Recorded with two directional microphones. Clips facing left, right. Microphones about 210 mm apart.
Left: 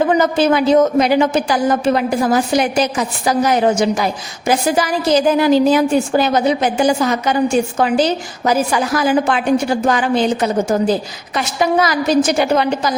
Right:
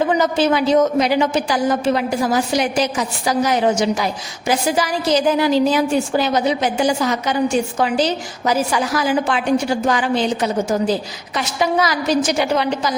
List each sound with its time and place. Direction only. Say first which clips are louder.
0.1 s a woman's voice: left 3 dB; 55° left (ahead or behind)